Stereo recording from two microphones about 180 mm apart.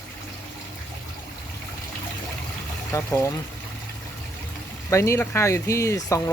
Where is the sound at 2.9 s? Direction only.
15° left (ahead or behind).